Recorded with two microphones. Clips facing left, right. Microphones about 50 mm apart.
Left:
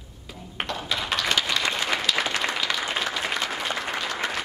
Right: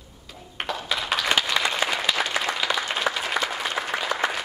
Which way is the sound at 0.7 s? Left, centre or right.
Centre.